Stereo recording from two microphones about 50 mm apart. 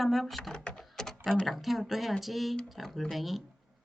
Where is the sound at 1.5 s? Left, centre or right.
Centre.